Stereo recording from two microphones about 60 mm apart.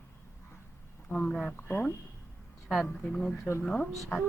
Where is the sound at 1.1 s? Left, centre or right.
Centre.